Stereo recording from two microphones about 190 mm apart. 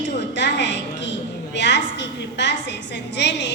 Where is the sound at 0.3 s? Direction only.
65° left (ahead or behind).